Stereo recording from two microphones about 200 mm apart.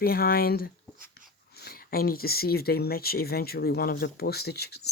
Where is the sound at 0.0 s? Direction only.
50° left (ahead or behind).